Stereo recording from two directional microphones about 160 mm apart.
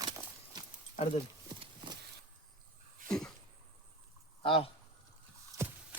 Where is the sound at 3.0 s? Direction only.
5° left (ahead or behind).